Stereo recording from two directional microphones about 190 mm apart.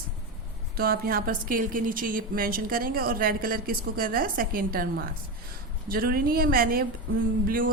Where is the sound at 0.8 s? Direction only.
50° right (ahead or behind).